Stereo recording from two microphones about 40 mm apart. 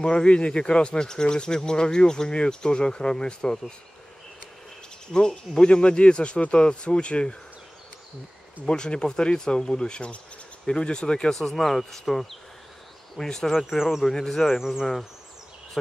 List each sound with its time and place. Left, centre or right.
0.0 s speech: left
5.1 s speech: centre
8.6 s speech: left
11.3 s speech: centre
13.7 s speech: centre
14.0 s speech: centre